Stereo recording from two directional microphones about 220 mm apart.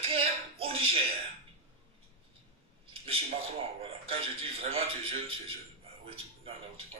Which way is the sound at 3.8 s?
25° right (ahead or behind).